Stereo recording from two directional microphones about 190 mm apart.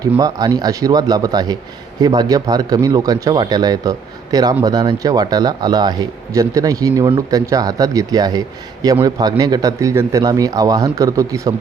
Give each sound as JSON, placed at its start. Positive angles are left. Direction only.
{"t": 0.2, "sound": "a man's voice", "side_deg": -20}